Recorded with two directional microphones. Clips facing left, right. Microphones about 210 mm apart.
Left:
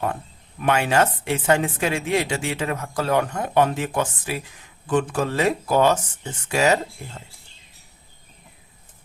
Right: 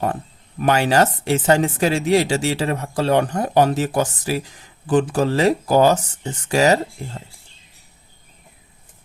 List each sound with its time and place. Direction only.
0.6 s speech: 35° right (ahead or behind)